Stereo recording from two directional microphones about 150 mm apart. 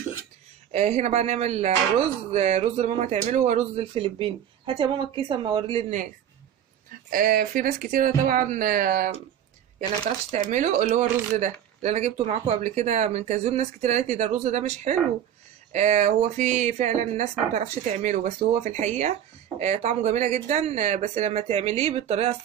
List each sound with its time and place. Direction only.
0.7 s speech: 45° right (ahead or behind)
7.1 s speech: 70° right (ahead or behind)
10.5 s speech: 50° right (ahead or behind)